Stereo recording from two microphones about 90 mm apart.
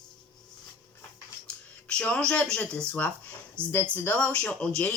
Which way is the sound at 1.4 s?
10° left (ahead or behind).